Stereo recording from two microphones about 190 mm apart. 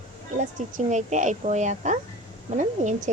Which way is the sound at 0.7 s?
40° right (ahead or behind).